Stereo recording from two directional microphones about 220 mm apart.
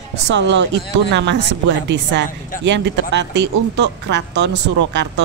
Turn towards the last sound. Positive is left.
turn(degrees=-50)  # may be behind; listen again after turning